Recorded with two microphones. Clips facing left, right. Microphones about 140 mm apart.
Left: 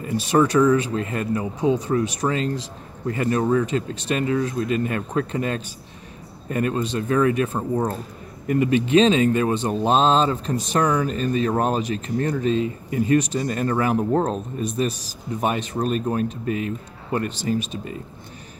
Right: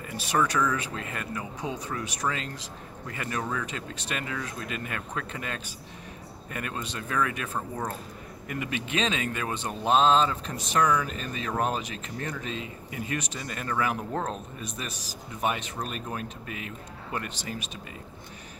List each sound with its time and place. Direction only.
0.0 s speech: 30° left (ahead or behind)